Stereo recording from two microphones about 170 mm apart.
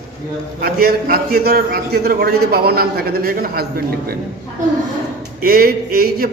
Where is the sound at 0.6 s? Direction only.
60° right (ahead or behind).